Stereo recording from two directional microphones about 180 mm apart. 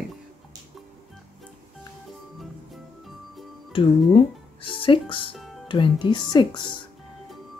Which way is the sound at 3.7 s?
30° left (ahead or behind).